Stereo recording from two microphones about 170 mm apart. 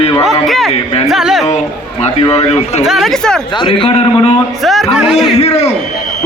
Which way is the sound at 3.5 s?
30° left (ahead or behind).